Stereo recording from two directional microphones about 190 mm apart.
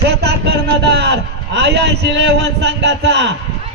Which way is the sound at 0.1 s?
60° right (ahead or behind).